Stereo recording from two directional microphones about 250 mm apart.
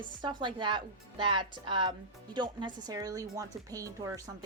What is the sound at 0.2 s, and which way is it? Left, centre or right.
Speech, centre.